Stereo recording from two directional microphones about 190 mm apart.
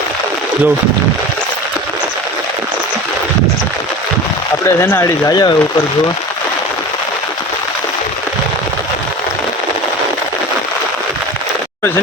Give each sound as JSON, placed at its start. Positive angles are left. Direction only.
{"t": 4.6, "sound": "speech", "side_deg": 10}